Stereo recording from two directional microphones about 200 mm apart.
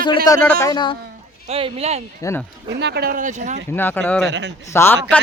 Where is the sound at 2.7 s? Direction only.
60° right (ahead or behind); by 3.5 s 35° right (ahead or behind).